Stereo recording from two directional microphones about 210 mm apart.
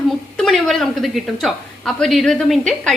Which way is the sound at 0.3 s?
Centre (ahead or behind).